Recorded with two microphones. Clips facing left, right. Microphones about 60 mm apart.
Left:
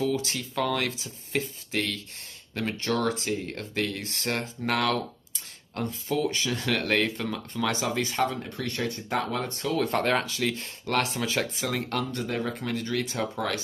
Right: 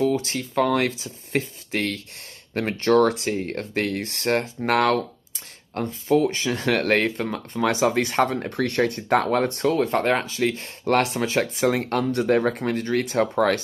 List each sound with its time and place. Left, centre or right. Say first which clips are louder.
0.0 s speech: right 5 dB; right
7.6 s speech: right 7 dB; right
9.8 s speech: right 4 dB; centre; by 12.5 s right
12.5 s speech: right 6 dB; right